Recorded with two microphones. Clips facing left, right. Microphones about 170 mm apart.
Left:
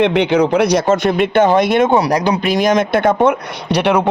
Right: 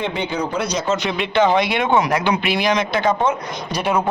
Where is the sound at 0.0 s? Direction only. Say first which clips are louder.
Left 10 dB; 75° left (ahead or behind).